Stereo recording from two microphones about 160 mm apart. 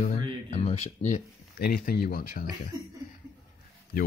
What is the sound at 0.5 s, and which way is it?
Speech, 45° left (ahead or behind).